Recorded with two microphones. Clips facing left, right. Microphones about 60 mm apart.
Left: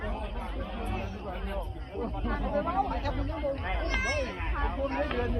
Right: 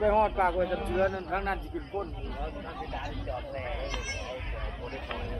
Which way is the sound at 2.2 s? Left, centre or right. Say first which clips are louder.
Left 8 dB; left.